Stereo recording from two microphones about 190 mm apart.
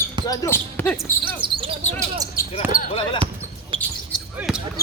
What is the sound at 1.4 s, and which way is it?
Cricket, 25° right (ahead or behind).